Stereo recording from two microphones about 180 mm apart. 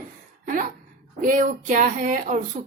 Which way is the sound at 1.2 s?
45° right (ahead or behind).